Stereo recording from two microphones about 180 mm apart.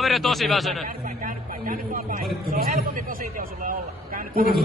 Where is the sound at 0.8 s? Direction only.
50° right (ahead or behind).